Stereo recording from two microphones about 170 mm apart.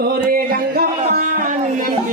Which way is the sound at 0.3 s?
60° right (ahead or behind).